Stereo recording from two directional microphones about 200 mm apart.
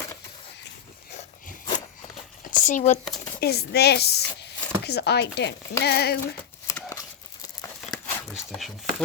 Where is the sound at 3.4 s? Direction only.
55° left (ahead or behind).